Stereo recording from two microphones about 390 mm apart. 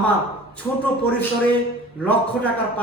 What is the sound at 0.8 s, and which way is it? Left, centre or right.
Speech, centre.